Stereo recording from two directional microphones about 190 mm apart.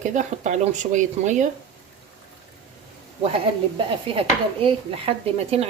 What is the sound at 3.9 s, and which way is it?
Speech, 30° right (ahead or behind).